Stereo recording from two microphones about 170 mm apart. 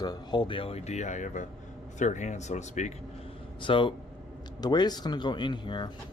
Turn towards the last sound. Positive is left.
turn(degrees=25)  # may be behind; listen again after turning